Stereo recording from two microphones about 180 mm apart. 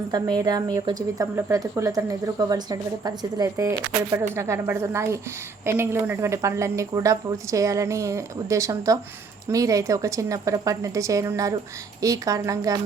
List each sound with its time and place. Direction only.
0.1 s a woman's voice: 20° right (ahead or behind)